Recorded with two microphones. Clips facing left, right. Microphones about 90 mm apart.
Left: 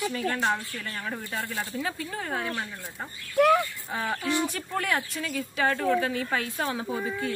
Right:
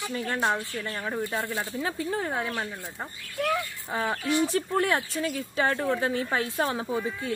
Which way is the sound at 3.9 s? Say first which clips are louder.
Right 4 dB; 20° right (ahead or behind).